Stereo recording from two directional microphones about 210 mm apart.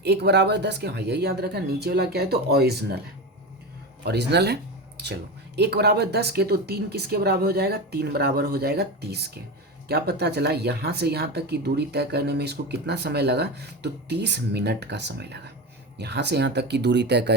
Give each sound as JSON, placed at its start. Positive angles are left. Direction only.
{"t": 0.0, "sound": "speech", "side_deg": -55}
{"t": 4.0, "sound": "speech", "side_deg": -50}